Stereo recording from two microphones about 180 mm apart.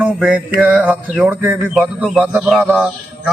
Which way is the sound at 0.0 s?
5° right (ahead or behind).